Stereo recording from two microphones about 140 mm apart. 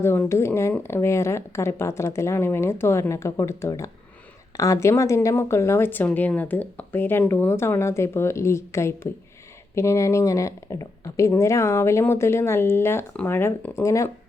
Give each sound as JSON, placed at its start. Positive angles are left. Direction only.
{"t": 0.0, "sound": "a woman's voice", "side_deg": 15}